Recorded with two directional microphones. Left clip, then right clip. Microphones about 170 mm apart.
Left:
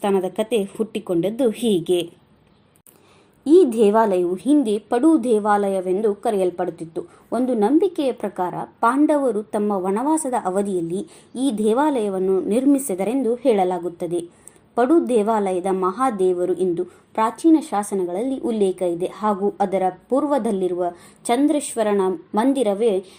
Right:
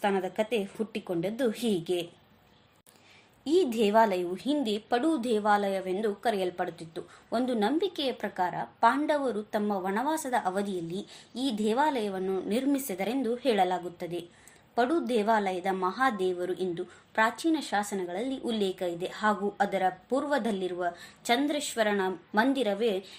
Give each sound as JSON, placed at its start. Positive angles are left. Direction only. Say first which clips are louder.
{"t": 0.0, "sound": "a woman's voice", "louder": "left 7 dB", "side_deg": 20}
{"t": 3.4, "sound": "a woman's voice", "louder": "left 12 dB", "side_deg": 10}